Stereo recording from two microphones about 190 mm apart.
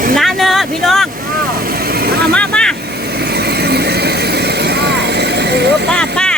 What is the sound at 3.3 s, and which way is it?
Vehicle, 60° right (ahead or behind).